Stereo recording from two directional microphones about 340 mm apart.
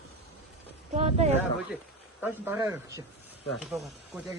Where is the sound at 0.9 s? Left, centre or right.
Centre.